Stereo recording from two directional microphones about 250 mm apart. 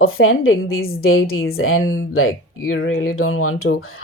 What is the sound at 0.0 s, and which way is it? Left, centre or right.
Speech, left.